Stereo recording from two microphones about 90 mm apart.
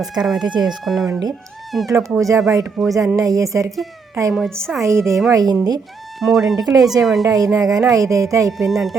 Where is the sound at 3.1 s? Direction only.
40° right (ahead or behind).